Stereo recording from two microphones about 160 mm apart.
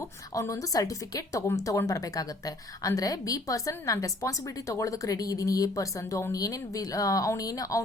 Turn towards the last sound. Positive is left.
turn(degrees=20)  # may be behind; listen again after turning